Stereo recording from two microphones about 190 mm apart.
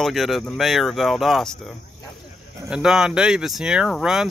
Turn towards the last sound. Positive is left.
turn(degrees=-5)  # may be behind; listen again after turning